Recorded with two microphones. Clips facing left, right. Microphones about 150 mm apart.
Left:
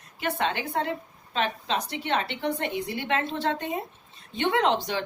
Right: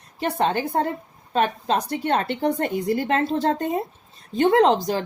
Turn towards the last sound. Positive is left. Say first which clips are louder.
# right 7 dB
turn(degrees=-40)  # may be behind; listen again after turning